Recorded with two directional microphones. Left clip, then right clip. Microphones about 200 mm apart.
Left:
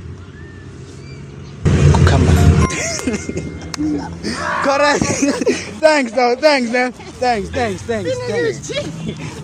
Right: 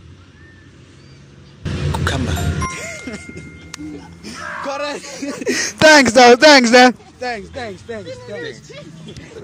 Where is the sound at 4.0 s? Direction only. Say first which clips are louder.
Left 8 dB; 10° right (ahead or behind).